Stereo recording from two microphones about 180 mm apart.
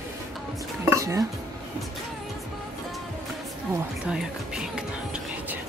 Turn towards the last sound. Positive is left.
turn(degrees=-5)  # may be behind; listen again after turning